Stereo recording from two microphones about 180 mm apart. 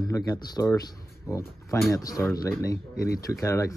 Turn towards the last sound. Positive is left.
turn(degrees=15)  # may be behind; listen again after turning